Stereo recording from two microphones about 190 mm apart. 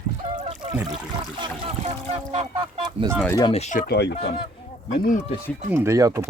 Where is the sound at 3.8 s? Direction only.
60° left (ahead or behind).